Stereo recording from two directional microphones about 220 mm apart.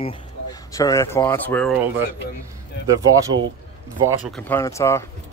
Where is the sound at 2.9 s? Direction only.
15° right (ahead or behind).